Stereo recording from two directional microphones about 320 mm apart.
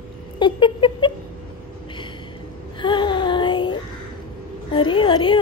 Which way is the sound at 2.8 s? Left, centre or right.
Centre.